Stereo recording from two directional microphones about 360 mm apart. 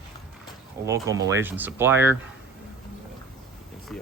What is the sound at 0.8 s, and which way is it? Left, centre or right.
Speech, centre.